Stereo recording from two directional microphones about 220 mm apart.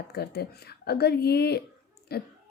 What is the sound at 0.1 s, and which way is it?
A woman's voice, 45° left (ahead or behind).